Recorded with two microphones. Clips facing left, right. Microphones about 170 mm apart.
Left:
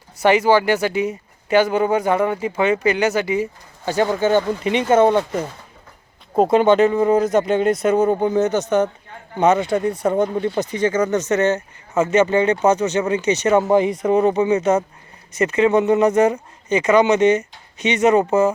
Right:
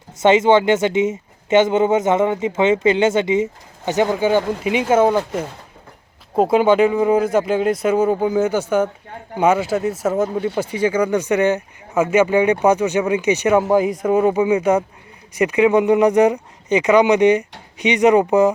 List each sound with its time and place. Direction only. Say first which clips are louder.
0.2 s speech: right 2 dB; 20° right (ahead or behind)